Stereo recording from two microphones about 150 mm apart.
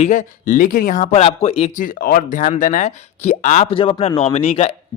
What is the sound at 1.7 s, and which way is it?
Speech, 65° left (ahead or behind).